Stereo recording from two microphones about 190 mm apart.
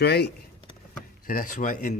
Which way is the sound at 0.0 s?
60° left (ahead or behind).